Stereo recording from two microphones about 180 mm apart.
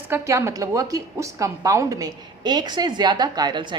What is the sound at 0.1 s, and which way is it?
A woman's voice, 15° right (ahead or behind).